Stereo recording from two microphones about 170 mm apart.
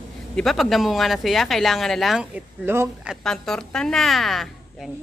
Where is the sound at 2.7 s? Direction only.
15° right (ahead or behind).